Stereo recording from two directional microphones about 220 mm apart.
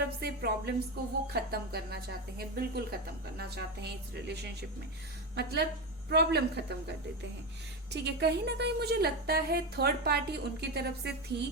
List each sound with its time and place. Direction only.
0.2 s a woman's voice: 45° right (ahead or behind)